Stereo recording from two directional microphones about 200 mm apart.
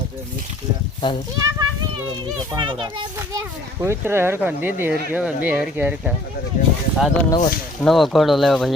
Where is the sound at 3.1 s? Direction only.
15° right (ahead or behind).